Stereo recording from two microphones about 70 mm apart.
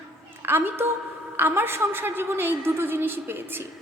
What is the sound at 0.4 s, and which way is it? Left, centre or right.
A woman's voice, right.